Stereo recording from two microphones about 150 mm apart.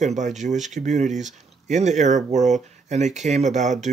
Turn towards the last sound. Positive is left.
turn(degrees=-50)  # may be behind; listen again after turning